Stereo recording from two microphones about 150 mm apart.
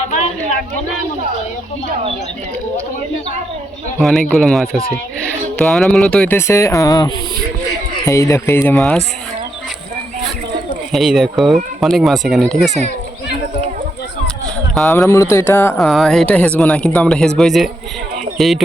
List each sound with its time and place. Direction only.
4.0 s speech: centre (ahead or behind)
10.9 s speech: centre (ahead or behind)
14.4 s a sound: centre (ahead or behind)
14.9 s speech: 20° left (ahead or behind)
15.8 s speech: centre (ahead or behind)